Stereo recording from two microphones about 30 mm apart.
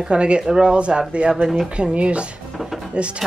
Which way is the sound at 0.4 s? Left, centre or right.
Right.